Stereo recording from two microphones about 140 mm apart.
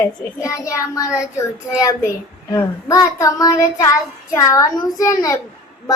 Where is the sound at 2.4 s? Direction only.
25° left (ahead or behind).